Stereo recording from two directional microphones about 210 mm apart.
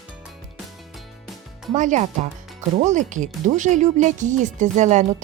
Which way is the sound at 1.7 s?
35° right (ahead or behind).